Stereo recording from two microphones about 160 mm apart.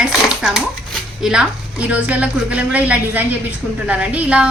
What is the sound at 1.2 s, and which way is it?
A woman's voice, 5° right (ahead or behind).